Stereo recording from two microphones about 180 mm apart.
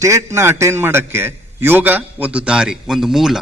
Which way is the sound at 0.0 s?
15° right (ahead or behind).